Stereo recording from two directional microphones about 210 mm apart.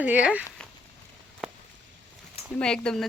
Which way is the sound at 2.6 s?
5° left (ahead or behind).